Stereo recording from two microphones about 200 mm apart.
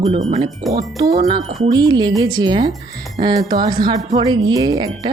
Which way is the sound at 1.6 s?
20° right (ahead or behind).